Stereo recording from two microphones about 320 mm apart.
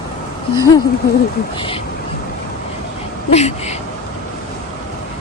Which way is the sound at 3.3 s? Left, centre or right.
Centre.